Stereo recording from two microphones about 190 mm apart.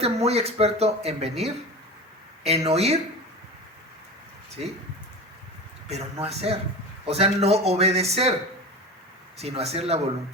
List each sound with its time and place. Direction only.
0.0 s speech: 35° right (ahead or behind)
5.9 s speech: 30° right (ahead or behind)
9.4 s speech: 35° right (ahead or behind)